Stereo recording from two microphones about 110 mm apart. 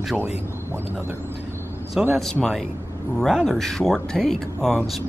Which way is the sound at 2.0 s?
5° right (ahead or behind).